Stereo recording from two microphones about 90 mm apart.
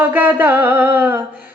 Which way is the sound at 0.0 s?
20° right (ahead or behind).